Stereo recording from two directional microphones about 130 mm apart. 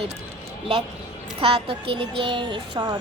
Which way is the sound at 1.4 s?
45° right (ahead or behind).